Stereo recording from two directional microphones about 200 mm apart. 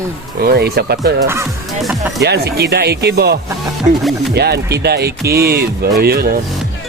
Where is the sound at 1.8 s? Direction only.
Centre (ahead or behind).